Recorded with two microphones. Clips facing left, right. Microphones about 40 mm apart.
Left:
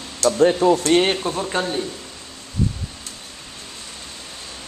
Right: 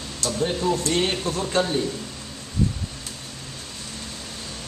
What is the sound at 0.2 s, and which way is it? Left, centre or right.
Speech, left.